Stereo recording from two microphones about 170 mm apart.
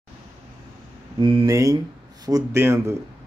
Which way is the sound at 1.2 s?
25° right (ahead or behind).